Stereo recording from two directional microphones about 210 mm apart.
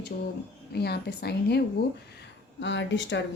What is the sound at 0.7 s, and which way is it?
Speech, 50° left (ahead or behind).